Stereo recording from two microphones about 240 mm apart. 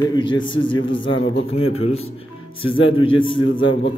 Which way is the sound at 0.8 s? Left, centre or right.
Left.